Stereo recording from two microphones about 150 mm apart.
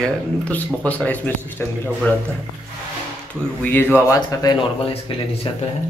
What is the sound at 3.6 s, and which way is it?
Speech, 10° left (ahead or behind).